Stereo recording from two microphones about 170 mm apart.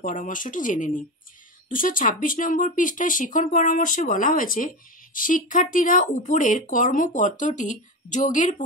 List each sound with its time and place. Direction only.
0.0 s speech: 50° left (ahead or behind)